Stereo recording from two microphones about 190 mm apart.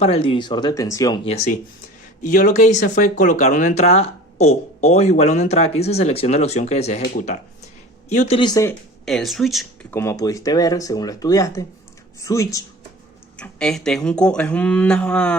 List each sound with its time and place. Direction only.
0.0 s speech: 30° left (ahead or behind)
1.2 s speech: 35° left (ahead or behind)
2.2 s speech: 45° left (ahead or behind)
7.0 s speech: 45° left (ahead or behind)
8.4 s speech: 20° left (ahead or behind)
9.0 s speech: centre (ahead or behind)
9.9 s speech: 15° left (ahead or behind)
13.3 s speech: 5° left (ahead or behind)